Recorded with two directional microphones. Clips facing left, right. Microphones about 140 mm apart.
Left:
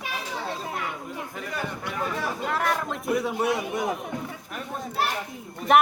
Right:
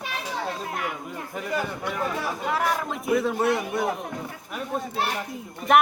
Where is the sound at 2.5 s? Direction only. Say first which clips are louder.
Right 2 dB; 5° right (ahead or behind).